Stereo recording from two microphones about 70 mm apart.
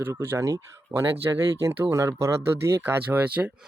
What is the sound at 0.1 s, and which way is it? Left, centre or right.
Speech, right.